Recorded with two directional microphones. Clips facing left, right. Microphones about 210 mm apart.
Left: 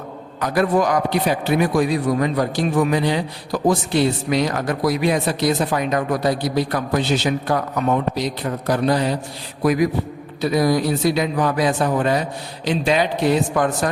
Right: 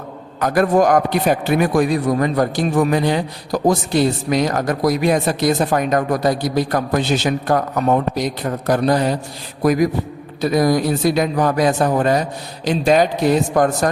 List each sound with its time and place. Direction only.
0.3 s a man's voice: 50° right (ahead or behind)